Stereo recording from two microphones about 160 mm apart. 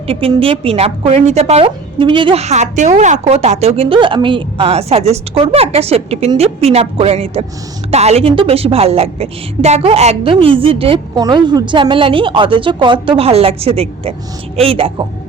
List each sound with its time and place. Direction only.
0.1 s a woman's voice: 35° right (ahead or behind)
11.1 s a woman's voice: 25° right (ahead or behind)